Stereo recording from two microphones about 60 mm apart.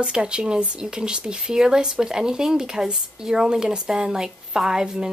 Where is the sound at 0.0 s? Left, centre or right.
Centre.